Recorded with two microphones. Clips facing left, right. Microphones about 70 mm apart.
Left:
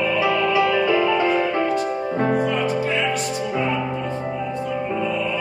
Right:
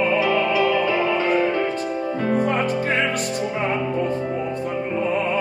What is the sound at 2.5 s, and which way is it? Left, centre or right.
Music, right.